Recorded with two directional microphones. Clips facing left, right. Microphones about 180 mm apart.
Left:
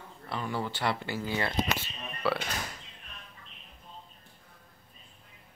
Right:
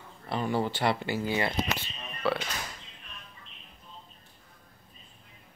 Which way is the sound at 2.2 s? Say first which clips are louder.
Right 1 dB; 5° left (ahead or behind).